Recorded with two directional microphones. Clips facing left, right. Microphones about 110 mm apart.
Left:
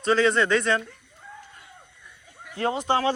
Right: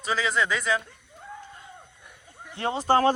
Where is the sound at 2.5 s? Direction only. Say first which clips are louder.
Left 2 dB; 25° right (ahead or behind).